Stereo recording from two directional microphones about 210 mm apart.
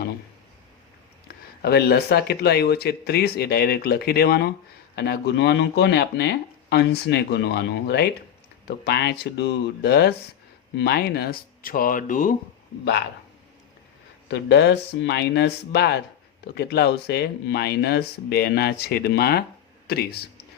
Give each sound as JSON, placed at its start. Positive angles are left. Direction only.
{"t": 1.6, "sound": "speech", "side_deg": 50}
{"t": 14.3, "sound": "speech", "side_deg": 55}